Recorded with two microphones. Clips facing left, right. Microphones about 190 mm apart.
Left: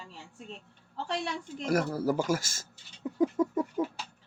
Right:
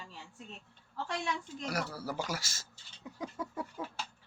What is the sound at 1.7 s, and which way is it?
Speech, 50° left (ahead or behind).